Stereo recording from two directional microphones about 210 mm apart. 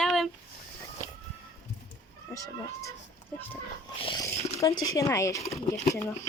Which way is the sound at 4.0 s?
20° left (ahead or behind).